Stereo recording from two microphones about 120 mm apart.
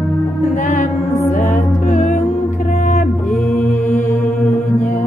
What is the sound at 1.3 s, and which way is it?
Music, 90° left.